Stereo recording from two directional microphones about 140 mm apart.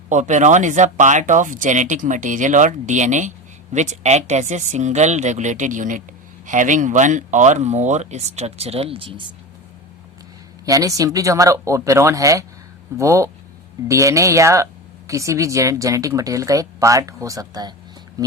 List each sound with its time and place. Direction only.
0.1 s speech: 60° right (ahead or behind); by 9.3 s 40° right (ahead or behind)
10.7 s speech: 25° right (ahead or behind)
18.2 s a sound: 25° right (ahead or behind)